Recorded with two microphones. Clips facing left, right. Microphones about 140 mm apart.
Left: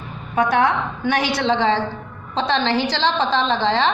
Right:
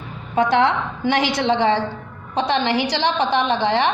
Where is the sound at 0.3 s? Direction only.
25° right (ahead or behind).